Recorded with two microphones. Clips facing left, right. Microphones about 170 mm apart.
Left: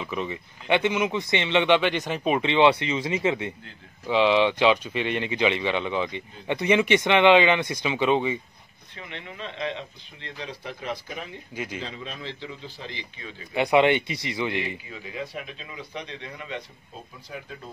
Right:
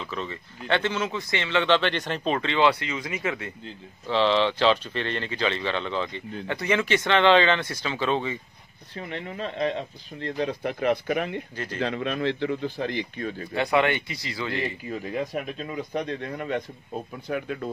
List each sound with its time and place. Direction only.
0.0 s speech: 15° left (ahead or behind)
8.9 s speech: 40° right (ahead or behind); by 11.4 s 65° right (ahead or behind)
11.5 s speech: 10° left (ahead or behind)
11.8 s speech: 65° right (ahead or behind)
13.6 s speech: 20° left (ahead or behind)
14.9 s speech: 50° right (ahead or behind)
17.3 s speech: 70° right (ahead or behind)